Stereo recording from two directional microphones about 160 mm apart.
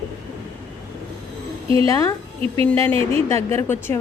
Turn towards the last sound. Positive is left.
turn(degrees=15)  # may be behind; listen again after turning